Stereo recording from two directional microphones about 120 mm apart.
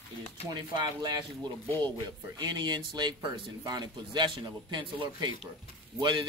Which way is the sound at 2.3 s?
35° right (ahead or behind).